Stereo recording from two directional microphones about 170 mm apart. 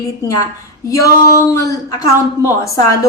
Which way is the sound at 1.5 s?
20° left (ahead or behind).